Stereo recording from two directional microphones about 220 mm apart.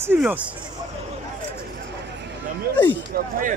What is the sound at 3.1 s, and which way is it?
Speech, 45° right (ahead or behind).